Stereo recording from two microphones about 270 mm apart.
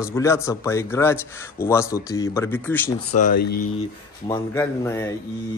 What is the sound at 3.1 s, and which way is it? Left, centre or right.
Speech, left.